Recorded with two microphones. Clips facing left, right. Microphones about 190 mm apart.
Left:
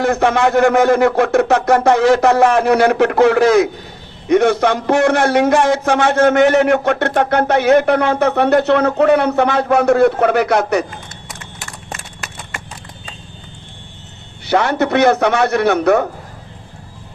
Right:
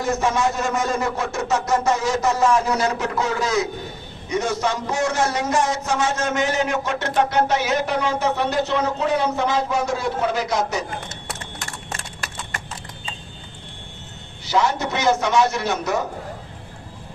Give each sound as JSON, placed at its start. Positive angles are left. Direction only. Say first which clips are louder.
{"t": 0.0, "sound": "a man's voice", "louder": "left 7 dB", "side_deg": 60}
{"t": 14.4, "sound": "a man's voice", "louder": "left 6 dB", "side_deg": 65}